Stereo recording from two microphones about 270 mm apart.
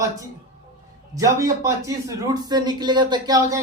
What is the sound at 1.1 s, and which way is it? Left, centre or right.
A man's voice, centre.